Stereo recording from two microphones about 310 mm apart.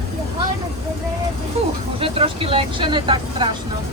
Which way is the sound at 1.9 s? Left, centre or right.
Centre.